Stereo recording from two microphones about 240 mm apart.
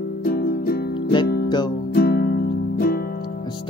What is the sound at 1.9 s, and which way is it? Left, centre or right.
Music, left.